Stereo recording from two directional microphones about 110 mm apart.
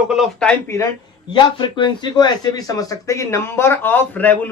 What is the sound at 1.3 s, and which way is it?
Speech, 45° left (ahead or behind).